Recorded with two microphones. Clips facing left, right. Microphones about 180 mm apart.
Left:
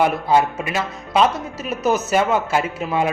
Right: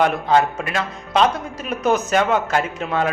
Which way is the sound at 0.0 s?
10° left (ahead or behind).